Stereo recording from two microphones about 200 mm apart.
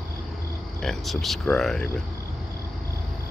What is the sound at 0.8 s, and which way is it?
Speech, centre (ahead or behind).